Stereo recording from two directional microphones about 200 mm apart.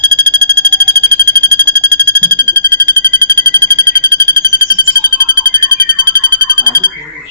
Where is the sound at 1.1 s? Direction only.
20° right (ahead or behind).